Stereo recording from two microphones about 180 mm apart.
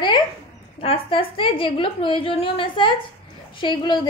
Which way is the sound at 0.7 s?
30° left (ahead or behind).